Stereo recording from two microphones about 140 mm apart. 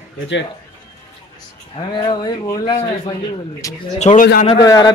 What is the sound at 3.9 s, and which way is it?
Speech, 60° left (ahead or behind).